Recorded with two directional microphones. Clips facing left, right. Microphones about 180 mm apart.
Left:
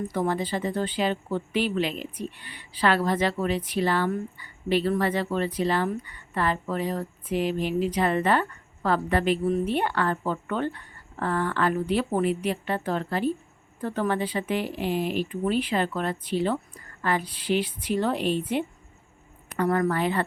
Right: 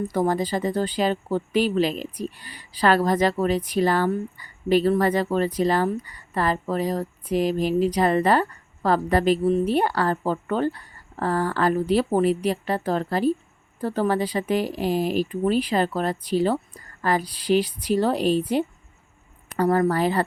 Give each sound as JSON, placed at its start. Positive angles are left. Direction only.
{"t": 0.1, "sound": "speech", "side_deg": -40}